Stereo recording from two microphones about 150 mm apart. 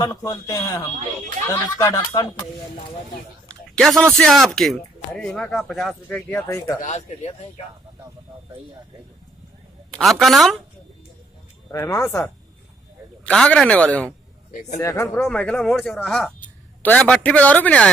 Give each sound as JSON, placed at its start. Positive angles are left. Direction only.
{"t": 0.0, "sound": "speech", "side_deg": 25}
{"t": 3.4, "sound": "speech", "side_deg": 5}
{"t": 6.8, "sound": "speech", "side_deg": 50}
{"t": 9.8, "sound": "a woman's voice", "side_deg": 5}
{"t": 11.7, "sound": "speech", "side_deg": 20}
{"t": 13.2, "sound": "a man's voice", "side_deg": 5}
{"t": 14.5, "sound": "a man's voice", "side_deg": 55}
{"t": 14.8, "sound": "speech", "side_deg": 20}
{"t": 15.2, "sound": "a man's voice", "side_deg": 10}